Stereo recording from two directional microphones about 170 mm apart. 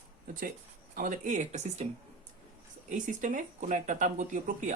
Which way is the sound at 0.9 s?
50° right (ahead or behind).